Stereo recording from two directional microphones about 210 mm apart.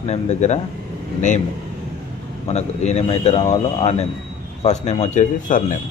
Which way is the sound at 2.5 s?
30° left (ahead or behind).